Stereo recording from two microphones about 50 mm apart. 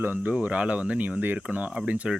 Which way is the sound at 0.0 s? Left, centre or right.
Right.